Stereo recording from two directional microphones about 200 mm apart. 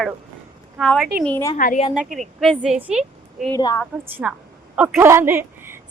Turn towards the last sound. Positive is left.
turn(degrees=-10)  # may be behind; listen again after turning